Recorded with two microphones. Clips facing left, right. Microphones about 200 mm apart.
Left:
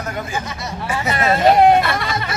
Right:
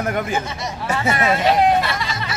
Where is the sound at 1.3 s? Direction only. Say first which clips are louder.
Left 5 dB; 50° left (ahead or behind).